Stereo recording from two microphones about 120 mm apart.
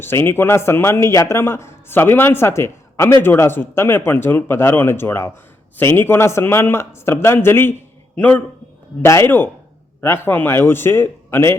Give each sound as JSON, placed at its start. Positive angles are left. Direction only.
{"t": 0.0, "sound": "a man's voice", "side_deg": 20}